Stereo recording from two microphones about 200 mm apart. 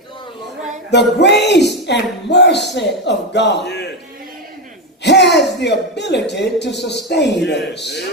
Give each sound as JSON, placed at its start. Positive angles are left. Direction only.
{"t": 0.9, "sound": "speech", "side_deg": 60}
{"t": 5.0, "sound": "a sound", "side_deg": 60}
{"t": 5.5, "sound": "speech", "side_deg": 60}